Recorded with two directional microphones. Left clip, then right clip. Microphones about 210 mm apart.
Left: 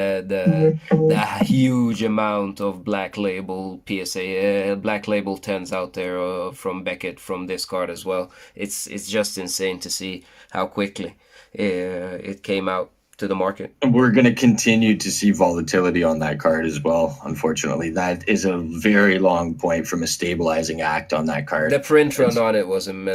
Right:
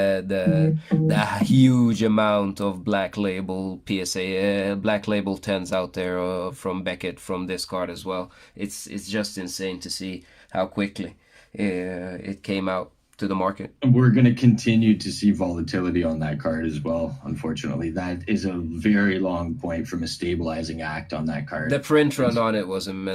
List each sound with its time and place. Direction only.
0.0 s speech: 10° right (ahead or behind)
13.8 s speech: 45° left (ahead or behind)
21.7 s speech: 5° right (ahead or behind)